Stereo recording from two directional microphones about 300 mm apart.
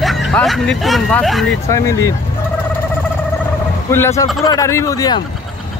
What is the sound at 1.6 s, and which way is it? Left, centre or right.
Speech, centre.